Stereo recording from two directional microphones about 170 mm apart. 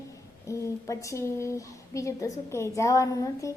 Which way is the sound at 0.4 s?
20° left (ahead or behind).